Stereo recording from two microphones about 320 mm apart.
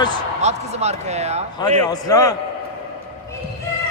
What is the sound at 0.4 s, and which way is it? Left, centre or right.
Speech, centre.